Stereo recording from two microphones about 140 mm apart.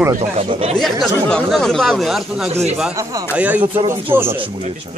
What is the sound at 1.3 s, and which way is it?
Speech, 5° left (ahead or behind).